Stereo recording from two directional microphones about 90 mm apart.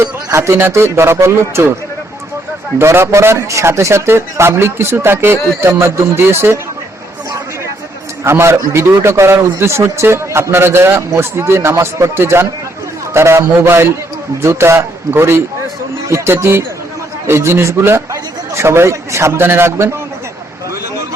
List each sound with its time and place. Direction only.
0.0 s a man's voice: 30° right (ahead or behind)
2.7 s a man's voice: 30° right (ahead or behind)
8.2 s a man's voice: 30° right (ahead or behind)